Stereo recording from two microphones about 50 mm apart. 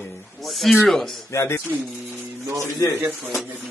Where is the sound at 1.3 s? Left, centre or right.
Left.